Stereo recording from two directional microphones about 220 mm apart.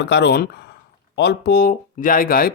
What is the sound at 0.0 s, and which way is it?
Speech, 50° left (ahead or behind).